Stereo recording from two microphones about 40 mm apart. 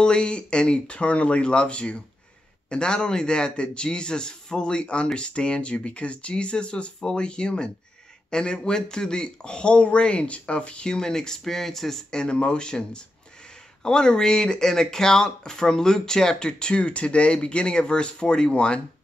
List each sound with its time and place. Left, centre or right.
0.0 s a man's voice: left; by 12.0 s centre
12.1 s a man's voice: left